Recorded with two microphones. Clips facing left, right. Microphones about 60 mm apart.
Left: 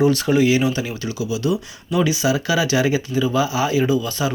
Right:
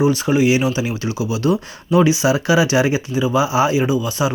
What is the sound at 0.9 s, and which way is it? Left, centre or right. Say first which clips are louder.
Speech: right 3 dB; right.